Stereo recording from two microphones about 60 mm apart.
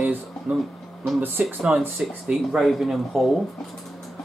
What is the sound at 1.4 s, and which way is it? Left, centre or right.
Speech, right.